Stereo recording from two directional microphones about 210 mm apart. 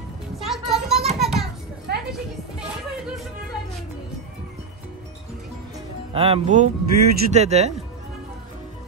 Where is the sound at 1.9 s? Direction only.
50° right (ahead or behind).